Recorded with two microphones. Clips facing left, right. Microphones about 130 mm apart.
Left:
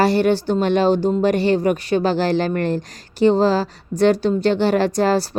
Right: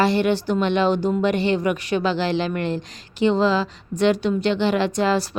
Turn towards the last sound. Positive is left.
turn(degrees=35)  # may be behind; listen again after turning